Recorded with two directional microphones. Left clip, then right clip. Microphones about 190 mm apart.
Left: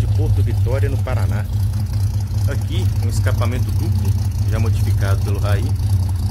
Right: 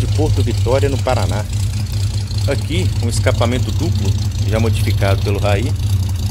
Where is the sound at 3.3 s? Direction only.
30° right (ahead or behind).